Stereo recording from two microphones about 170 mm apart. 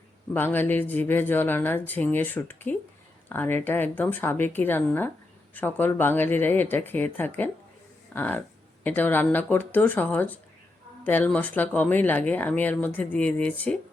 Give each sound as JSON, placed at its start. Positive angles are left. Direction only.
{"t": 0.3, "sound": "speech", "side_deg": 10}